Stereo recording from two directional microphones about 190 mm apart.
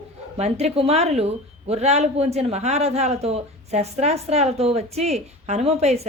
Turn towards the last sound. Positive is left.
turn(degrees=-35)  # may be behind; listen again after turning